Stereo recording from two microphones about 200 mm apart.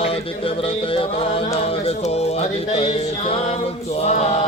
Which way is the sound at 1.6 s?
30° left (ahead or behind).